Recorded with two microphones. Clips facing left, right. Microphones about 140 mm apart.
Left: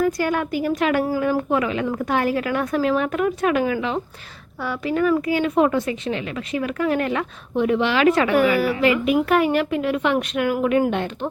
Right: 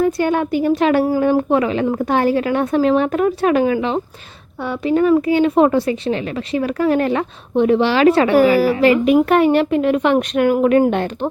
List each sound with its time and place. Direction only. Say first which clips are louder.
0.0 s a woman's voice: right 4 dB; 25° right (ahead or behind); by 11.1 s 45° right (ahead or behind)